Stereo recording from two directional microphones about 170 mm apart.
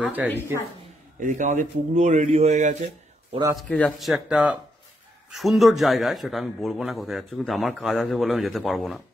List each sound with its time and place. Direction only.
0.0 s speech: 10° right (ahead or behind)
1.2 s a man's voice: 45° right (ahead or behind)
3.6 s a man's voice: 5° left (ahead or behind)